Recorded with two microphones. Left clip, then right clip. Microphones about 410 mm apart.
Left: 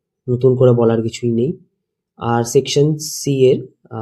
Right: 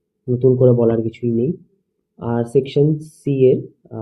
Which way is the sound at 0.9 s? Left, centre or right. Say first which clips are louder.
Left 2 dB; left.